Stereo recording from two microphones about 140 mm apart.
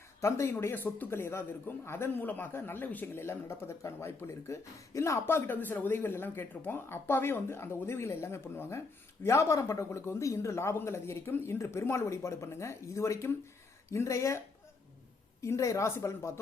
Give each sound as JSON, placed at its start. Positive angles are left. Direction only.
{"t": 0.2, "sound": "a man's voice", "side_deg": 20}
{"t": 15.4, "sound": "speech", "side_deg": 20}